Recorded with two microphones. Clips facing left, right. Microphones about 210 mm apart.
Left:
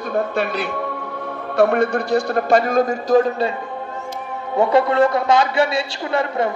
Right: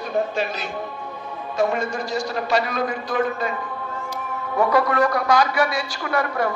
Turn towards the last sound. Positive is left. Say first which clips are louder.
# left 3 dB
turn(degrees=25)  # may be behind; listen again after turning